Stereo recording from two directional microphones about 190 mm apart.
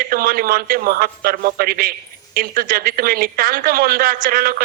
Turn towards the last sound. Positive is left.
turn(degrees=-50)  # may be behind; listen again after turning